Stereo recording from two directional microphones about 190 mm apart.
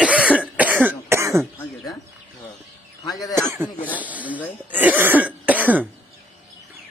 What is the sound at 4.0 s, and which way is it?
Speech, 10° right (ahead or behind).